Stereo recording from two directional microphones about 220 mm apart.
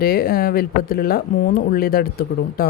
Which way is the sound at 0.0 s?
45° left (ahead or behind).